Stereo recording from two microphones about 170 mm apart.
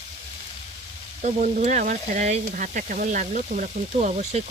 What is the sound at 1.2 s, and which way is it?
Speech, 45° right (ahead or behind).